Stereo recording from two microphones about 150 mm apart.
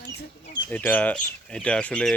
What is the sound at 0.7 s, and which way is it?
Speech, 10° left (ahead or behind).